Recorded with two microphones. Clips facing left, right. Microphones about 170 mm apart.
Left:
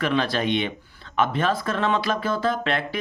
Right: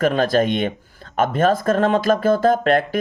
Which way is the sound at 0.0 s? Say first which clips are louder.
Right 6 dB; 45° right (ahead or behind).